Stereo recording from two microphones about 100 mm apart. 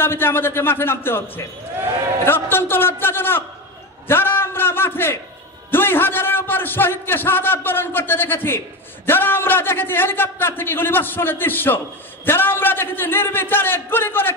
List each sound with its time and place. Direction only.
0.0 s a man's voice: 25° left (ahead or behind)